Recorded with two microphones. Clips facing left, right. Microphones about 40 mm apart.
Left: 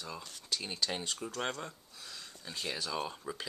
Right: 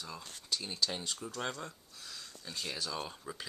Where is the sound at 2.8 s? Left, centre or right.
Centre.